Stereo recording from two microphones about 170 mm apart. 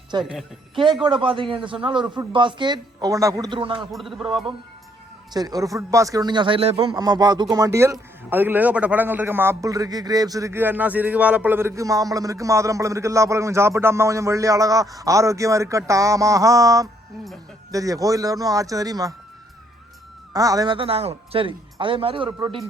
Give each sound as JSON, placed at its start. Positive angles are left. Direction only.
{"t": 0.1, "sound": "a man's voice", "side_deg": -25}
{"t": 3.9, "sound": "a man's voice", "side_deg": 0}
{"t": 5.3, "sound": "a man's voice", "side_deg": -20}
{"t": 20.3, "sound": "speech", "side_deg": -20}
{"t": 22.4, "sound": "a man's voice", "side_deg": -20}